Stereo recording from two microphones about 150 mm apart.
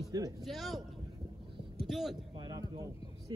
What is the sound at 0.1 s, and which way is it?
Speech, 25° right (ahead or behind).